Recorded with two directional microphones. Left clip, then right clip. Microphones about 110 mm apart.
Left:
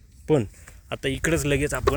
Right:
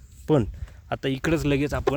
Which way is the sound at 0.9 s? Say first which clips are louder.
Even; 45° right (ahead or behind).